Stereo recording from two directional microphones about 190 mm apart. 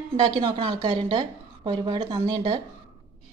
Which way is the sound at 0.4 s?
25° right (ahead or behind).